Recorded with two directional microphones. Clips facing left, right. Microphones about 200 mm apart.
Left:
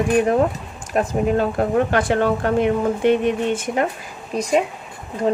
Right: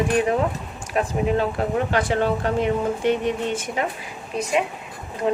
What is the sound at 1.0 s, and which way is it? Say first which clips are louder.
Speech: left 3 dB; 40° left (ahead or behind).